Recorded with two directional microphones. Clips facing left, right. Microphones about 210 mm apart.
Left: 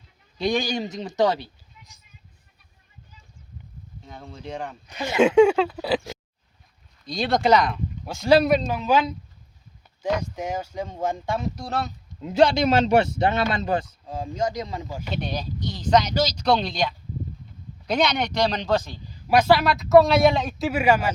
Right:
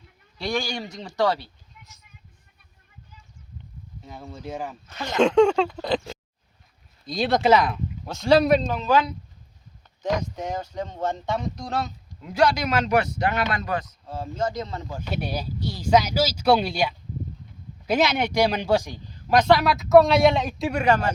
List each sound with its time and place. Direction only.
0.3 s speech: 20° left (ahead or behind)
4.0 s a man's voice: 5° right (ahead or behind)
4.9 s speech: 10° left (ahead or behind)
7.0 s a man's voice: centre (ahead or behind)
8.0 s a man's voice: 10° left (ahead or behind)
8.9 s speech: 20° left (ahead or behind)
10.0 s speech: 5° left (ahead or behind)
12.2 s speech: 25° left (ahead or behind)
13.8 s speech: 15° left (ahead or behind)
15.1 s speech: 10° right (ahead or behind)
19.3 s a man's voice: 5° left (ahead or behind)